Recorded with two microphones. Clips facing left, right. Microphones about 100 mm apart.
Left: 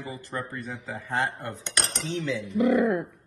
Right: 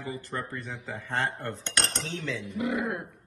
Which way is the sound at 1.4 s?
10° left (ahead or behind).